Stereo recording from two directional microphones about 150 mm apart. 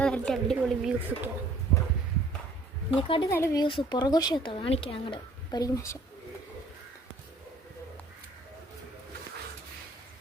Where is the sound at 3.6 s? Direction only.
30° left (ahead or behind).